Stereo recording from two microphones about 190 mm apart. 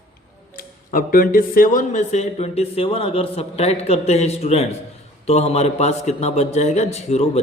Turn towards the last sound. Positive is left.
turn(degrees=35)  # may be behind; listen again after turning